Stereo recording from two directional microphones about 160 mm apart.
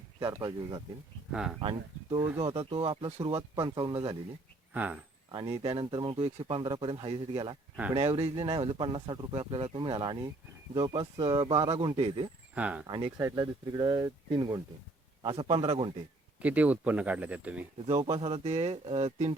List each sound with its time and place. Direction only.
0.2 s speech: 25° right (ahead or behind)
1.3 s speech: 5° right (ahead or behind)
2.1 s speech: 15° right (ahead or behind)
2.4 s speech: 35° right (ahead or behind)
4.7 s speech: 10° right (ahead or behind)
5.3 s speech: 25° right (ahead or behind)
12.5 s speech: 10° right (ahead or behind)
12.9 s speech: 25° right (ahead or behind)
15.2 s speech: 35° right (ahead or behind)
16.4 s speech: 10° right (ahead or behind)
17.8 s speech: 30° right (ahead or behind)